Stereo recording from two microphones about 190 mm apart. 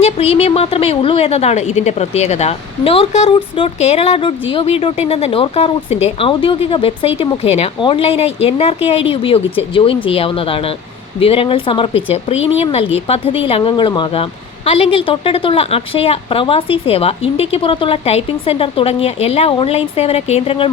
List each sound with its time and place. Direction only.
0.0 s a woman's voice: 30° left (ahead or behind)